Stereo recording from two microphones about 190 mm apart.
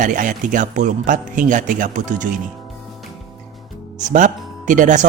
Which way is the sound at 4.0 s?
40° right (ahead or behind).